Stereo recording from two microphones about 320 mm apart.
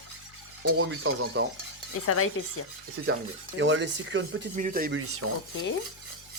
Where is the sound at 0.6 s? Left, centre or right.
Right.